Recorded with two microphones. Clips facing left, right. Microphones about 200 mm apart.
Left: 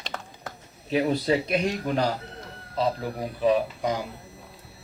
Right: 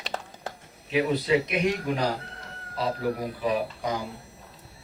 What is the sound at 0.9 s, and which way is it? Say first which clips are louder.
Speech: even; 35° left (ahead or behind).